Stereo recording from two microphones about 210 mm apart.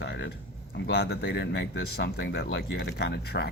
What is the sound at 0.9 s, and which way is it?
Speech, 50° left (ahead or behind).